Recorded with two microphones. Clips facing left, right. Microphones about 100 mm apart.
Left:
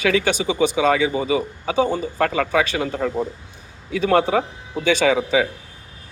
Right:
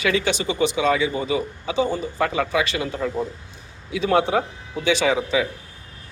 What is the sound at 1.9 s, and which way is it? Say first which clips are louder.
A man's voice: left 2 dB; 55° left (ahead or behind).